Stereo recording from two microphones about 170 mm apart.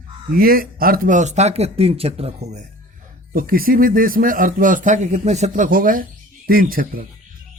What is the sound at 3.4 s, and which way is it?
Speech, 60° right (ahead or behind).